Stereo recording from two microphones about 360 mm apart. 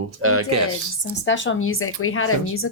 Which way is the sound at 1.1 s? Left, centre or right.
Left.